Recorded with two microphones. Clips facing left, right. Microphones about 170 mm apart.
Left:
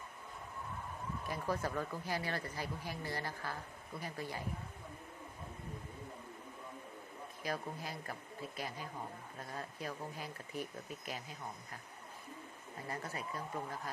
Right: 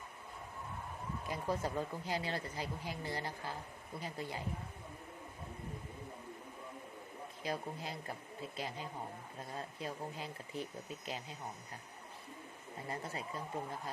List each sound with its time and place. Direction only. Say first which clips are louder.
1.3 s speech: right 1 dB; 20° right (ahead or behind)
7.4 s speech: even; 25° right (ahead or behind)
12.9 s speech: even; 25° right (ahead or behind)